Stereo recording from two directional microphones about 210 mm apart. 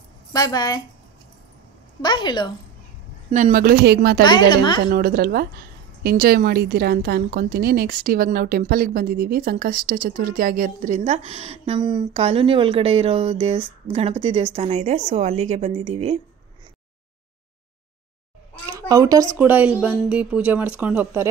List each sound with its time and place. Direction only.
0.3 s a woman's voice: 15° left (ahead or behind)
2.0 s a woman's voice: 20° left (ahead or behind)
3.3 s a woman's voice: 40° right (ahead or behind)
4.2 s a woman's voice: 20° left (ahead or behind)
4.8 s a woman's voice: 45° right (ahead or behind); by 16.2 s 30° right (ahead or behind)
18.7 s speech: 15° right (ahead or behind)